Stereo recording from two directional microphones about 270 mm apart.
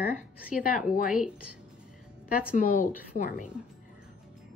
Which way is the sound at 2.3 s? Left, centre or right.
Left.